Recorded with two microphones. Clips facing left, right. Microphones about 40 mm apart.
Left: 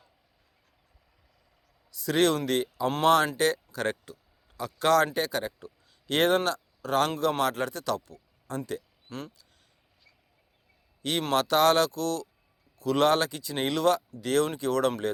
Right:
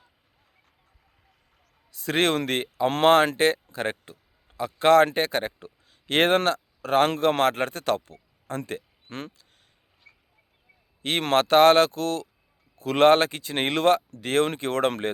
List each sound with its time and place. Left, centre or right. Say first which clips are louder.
1.9 s a man's voice: right 1 dB; right
10.0 s a sound: right 7 dB; right
11.2 s speech: right 6 dB; right